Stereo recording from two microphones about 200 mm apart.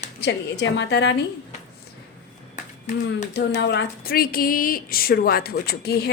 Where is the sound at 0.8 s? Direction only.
60° left (ahead or behind).